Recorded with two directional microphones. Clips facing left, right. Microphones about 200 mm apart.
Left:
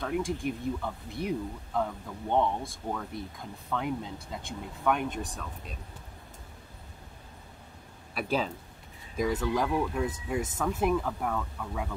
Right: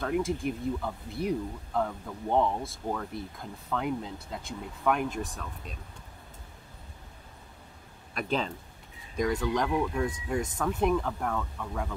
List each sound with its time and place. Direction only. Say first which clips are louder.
0.0 s speech: right 2 dB; centre (ahead or behind)
8.1 s speech: left 1 dB; 5° left (ahead or behind)